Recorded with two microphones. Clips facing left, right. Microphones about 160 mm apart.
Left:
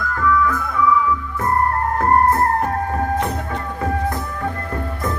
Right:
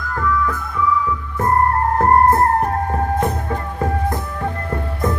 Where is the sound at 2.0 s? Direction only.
35° right (ahead or behind).